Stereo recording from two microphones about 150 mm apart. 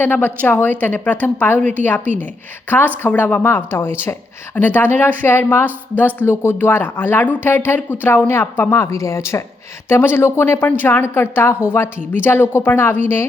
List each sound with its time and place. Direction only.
0.0 s speech: 15° left (ahead or behind)